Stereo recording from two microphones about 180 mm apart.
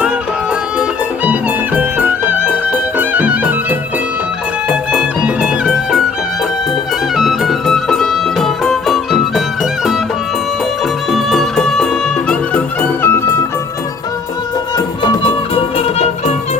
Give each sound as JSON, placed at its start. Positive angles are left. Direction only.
{"t": 0.8, "sound": "music", "side_deg": -10}
{"t": 7.2, "sound": "music", "side_deg": 0}
{"t": 11.1, "sound": "music", "side_deg": 0}
{"t": 15.0, "sound": "music", "side_deg": 30}